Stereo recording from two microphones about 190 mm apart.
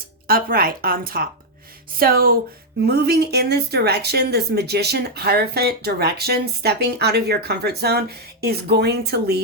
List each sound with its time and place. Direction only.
0.3 s speech: 50° right (ahead or behind)